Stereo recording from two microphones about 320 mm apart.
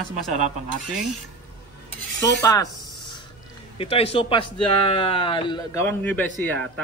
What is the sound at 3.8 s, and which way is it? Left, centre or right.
Speech, centre.